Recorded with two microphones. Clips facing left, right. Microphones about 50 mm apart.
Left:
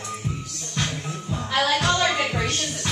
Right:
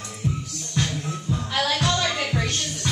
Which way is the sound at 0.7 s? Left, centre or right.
Left.